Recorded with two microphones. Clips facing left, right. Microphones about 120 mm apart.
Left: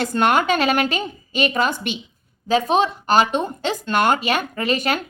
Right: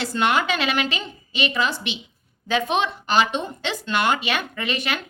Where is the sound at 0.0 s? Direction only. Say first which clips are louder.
Left 4 dB; 45° left (ahead or behind).